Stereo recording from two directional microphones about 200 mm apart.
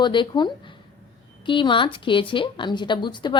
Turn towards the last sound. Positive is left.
turn(degrees=25)  # may be behind; listen again after turning